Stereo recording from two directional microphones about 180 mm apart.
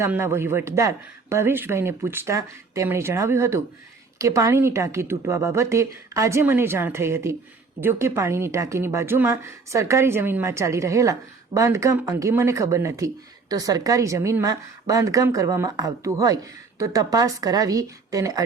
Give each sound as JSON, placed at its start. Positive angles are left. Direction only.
{"t": 0.0, "sound": "a woman's voice", "side_deg": -15}